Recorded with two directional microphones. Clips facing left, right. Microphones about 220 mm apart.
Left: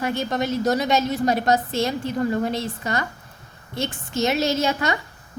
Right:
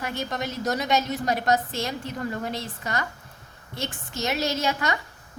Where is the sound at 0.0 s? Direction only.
30° left (ahead or behind).